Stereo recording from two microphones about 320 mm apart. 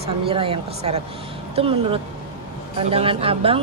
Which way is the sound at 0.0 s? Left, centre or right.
Centre.